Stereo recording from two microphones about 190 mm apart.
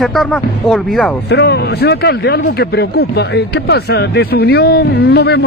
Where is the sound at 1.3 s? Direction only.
60° left (ahead or behind).